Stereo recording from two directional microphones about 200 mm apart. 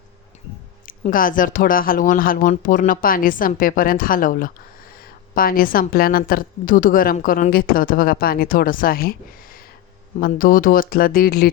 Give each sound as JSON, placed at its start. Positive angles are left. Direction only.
{"t": 0.9, "sound": "a woman's voice", "side_deg": 45}
{"t": 10.2, "sound": "a woman's voice", "side_deg": 45}